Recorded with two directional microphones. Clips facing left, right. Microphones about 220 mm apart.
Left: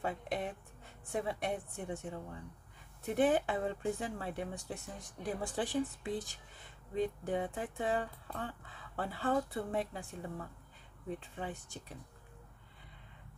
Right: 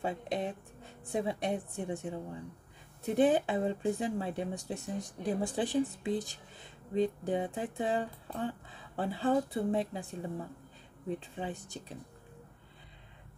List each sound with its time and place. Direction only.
0.0 s speech: 25° right (ahead or behind)
5.4 s speech: 15° right (ahead or behind)
7.2 s speech: 20° right (ahead or behind)